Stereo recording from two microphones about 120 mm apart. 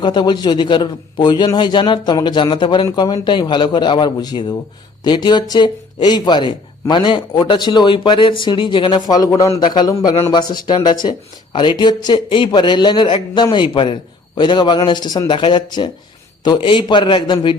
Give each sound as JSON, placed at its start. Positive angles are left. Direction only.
{"t": 0.0, "sound": "speech", "side_deg": 40}